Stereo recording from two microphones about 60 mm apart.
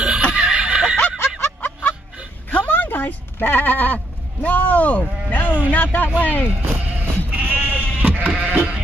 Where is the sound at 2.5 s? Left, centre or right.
Left.